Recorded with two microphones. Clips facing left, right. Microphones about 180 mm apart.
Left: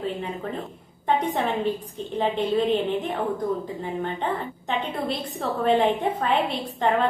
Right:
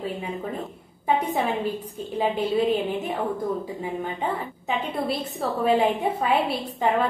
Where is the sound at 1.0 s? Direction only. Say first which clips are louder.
Even; 10° right (ahead or behind).